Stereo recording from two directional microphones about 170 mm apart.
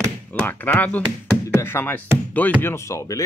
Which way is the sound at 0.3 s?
10° left (ahead or behind).